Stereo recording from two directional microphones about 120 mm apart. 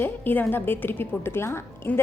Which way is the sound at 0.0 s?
15° left (ahead or behind).